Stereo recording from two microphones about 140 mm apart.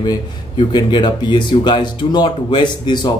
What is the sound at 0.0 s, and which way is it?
Speech, 30° left (ahead or behind).